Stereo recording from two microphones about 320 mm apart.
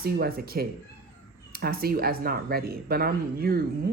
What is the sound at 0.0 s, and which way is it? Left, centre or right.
Speech, right.